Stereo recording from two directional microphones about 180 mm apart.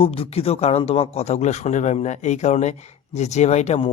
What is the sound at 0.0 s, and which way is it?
Speech, 30° left (ahead or behind).